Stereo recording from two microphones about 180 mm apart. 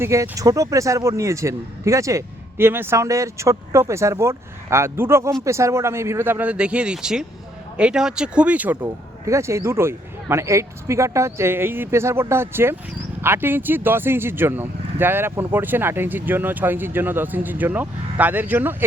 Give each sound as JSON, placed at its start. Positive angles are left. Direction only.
{"t": 0.0, "sound": "speech", "side_deg": -15}